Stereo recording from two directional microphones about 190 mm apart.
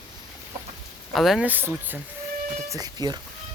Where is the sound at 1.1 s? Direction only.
Centre (ahead or behind); by 3.2 s 20° right (ahead or behind).